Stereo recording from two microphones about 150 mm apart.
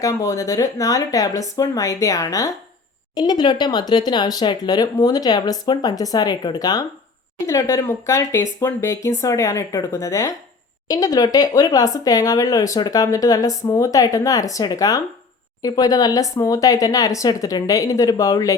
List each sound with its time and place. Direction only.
0.0 s speech: 20° left (ahead or behind)